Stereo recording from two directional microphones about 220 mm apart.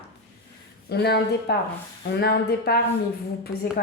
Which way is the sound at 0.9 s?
50° left (ahead or behind).